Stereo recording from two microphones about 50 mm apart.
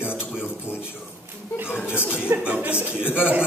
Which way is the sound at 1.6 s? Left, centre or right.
Left.